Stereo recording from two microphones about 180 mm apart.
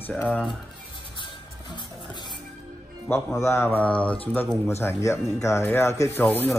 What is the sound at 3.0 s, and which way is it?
Speech, 15° left (ahead or behind).